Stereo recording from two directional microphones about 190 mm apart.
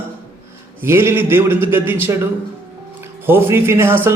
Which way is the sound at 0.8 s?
15° right (ahead or behind).